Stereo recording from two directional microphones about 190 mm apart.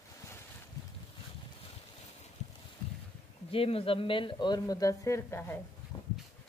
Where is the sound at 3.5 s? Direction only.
30° left (ahead or behind); by 5.6 s 15° left (ahead or behind).